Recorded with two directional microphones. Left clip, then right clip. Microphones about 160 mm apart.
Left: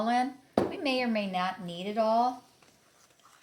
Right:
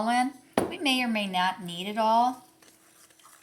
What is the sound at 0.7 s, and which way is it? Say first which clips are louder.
Speech: right 3 dB; 30° left (ahead or behind).